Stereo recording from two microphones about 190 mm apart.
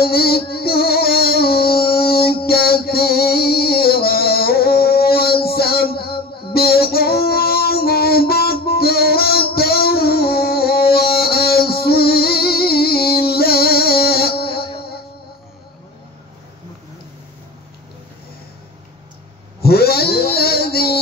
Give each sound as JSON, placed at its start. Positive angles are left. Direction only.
{"t": 0.0, "sound": "music", "side_deg": 55}
{"t": 6.5, "sound": "child singing", "side_deg": 55}
{"t": 19.6, "sound": "a sound", "side_deg": 55}